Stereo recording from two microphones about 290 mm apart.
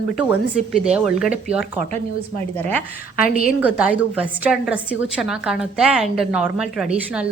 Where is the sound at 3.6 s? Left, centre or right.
Centre.